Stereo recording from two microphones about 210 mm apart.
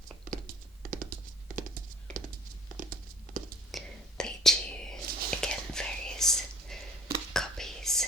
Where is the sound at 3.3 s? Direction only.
40° right (ahead or behind).